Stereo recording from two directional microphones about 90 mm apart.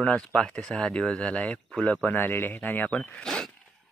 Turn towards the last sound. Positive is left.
turn(degrees=5)  # may be behind; listen again after turning